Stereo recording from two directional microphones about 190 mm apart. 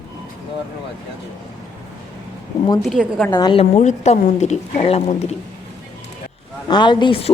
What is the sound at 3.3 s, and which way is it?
A woman's voice, 20° left (ahead or behind).